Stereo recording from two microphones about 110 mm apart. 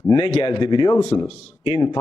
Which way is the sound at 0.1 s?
40° left (ahead or behind).